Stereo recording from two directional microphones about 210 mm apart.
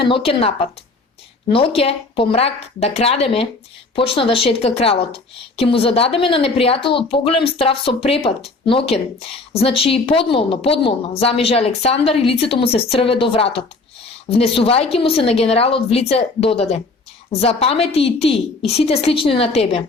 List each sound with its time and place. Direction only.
0.0 s a woman's voice: 25° left (ahead or behind)